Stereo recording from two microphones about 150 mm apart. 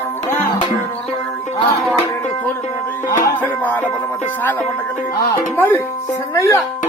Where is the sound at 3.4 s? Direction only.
15° left (ahead or behind).